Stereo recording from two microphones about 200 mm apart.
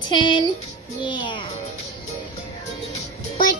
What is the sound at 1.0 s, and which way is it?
Music, 25° left (ahead or behind).